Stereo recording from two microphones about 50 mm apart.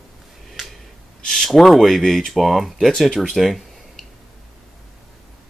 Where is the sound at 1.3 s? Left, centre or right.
Centre.